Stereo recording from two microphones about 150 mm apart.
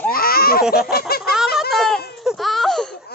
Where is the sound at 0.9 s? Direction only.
90° left.